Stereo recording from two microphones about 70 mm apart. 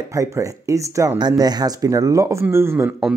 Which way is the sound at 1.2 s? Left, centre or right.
Right.